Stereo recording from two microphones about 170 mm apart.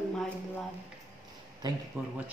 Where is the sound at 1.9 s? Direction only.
15° right (ahead or behind).